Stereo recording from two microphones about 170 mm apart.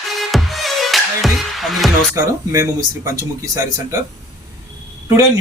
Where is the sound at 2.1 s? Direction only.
20° right (ahead or behind).